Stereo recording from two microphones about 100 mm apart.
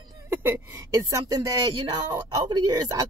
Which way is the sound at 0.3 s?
20° right (ahead or behind).